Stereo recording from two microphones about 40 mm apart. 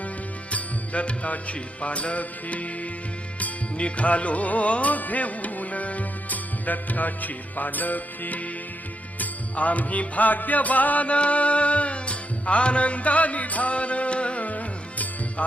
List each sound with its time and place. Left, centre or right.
0.5 s music: left
3.8 s music: left